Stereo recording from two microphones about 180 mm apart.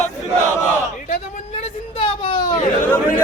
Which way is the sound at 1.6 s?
30° left (ahead or behind).